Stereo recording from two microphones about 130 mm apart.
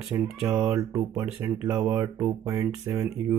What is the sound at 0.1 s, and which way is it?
Speech, 25° right (ahead or behind).